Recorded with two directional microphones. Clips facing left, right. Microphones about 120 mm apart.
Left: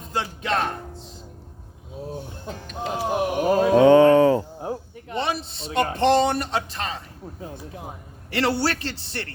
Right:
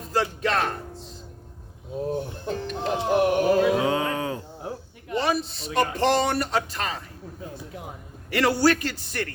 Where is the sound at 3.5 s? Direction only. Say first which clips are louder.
Left 5 dB; 40° left (ahead or behind).